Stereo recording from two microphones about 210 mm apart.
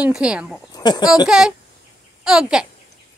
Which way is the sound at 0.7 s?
20° left (ahead or behind).